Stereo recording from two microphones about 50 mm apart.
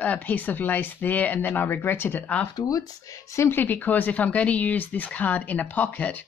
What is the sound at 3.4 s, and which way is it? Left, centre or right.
Speech, left.